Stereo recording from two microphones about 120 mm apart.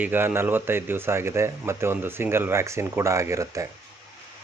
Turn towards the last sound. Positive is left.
turn(degrees=-25)  # may be behind; listen again after turning